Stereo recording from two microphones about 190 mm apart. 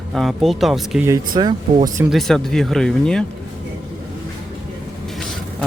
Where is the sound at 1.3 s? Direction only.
25° right (ahead or behind).